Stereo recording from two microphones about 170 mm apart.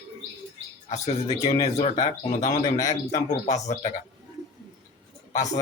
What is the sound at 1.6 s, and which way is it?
Speech, 40° left (ahead or behind).